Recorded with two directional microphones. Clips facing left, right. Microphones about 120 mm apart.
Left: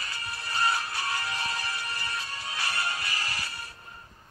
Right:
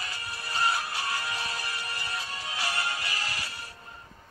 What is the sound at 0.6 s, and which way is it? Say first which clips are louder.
Music: even; 15° right (ahead or behind).